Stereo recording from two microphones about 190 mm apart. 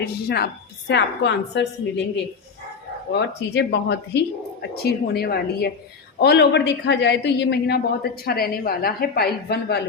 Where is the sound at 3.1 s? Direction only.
60° left (ahead or behind).